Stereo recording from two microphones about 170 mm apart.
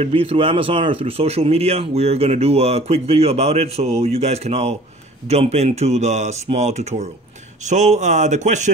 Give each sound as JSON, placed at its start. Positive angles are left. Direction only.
{"t": 0.0, "sound": "speech", "side_deg": -35}